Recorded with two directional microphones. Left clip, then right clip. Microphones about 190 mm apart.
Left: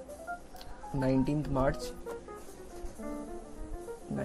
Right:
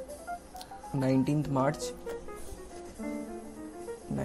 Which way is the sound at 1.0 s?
5° right (ahead or behind).